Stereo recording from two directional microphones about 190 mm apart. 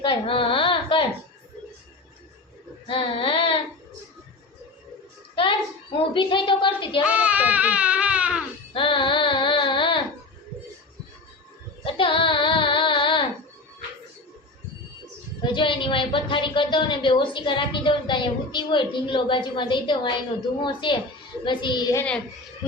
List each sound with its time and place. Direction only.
0.0 s a sound: 25° left (ahead or behind)
2.8 s child singing: 25° left (ahead or behind)
6.0 s a woman's voice: 25° left (ahead or behind)
7.0 s speech: 5° right (ahead or behind)
8.7 s music: 25° left (ahead or behind)
11.8 s child singing: 25° left (ahead or behind)
15.4 s a woman's voice: 25° left (ahead or behind)